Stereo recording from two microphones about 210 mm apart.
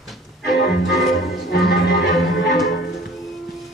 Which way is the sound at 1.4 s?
50° left (ahead or behind).